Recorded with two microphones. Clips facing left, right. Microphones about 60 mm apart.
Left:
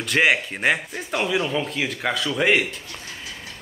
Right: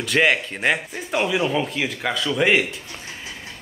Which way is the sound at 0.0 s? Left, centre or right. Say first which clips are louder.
Right 1 dB; centre.